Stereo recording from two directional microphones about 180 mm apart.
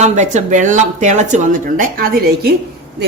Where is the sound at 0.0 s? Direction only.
40° right (ahead or behind); by 2.6 s 60° right (ahead or behind).